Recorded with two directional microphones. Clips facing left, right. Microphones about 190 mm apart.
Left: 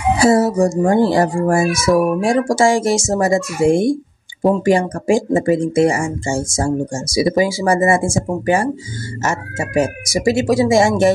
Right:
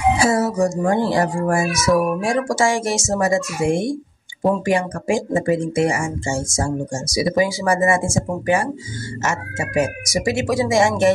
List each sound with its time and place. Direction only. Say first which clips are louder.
0.2 s speech: left 5 dB; 30° left (ahead or behind)